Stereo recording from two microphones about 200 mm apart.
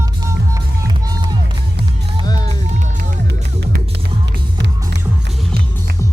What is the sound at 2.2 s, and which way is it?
Music, 20° left (ahead or behind).